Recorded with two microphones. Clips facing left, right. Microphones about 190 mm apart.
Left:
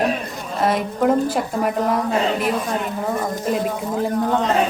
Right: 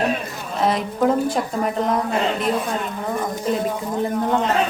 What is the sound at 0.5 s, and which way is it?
A woman's voice, centre (ahead or behind).